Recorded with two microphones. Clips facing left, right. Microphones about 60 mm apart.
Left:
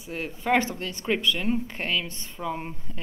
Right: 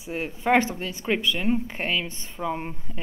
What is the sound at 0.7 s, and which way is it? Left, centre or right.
A woman's voice, centre.